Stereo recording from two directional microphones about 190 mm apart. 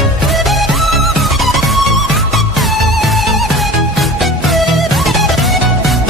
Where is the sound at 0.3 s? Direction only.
Centre (ahead or behind).